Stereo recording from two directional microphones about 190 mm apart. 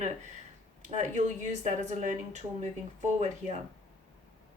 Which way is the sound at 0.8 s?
40° right (ahead or behind).